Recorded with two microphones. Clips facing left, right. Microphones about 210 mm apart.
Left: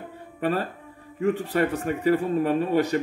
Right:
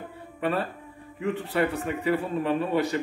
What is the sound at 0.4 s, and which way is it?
Speech, 40° left (ahead or behind).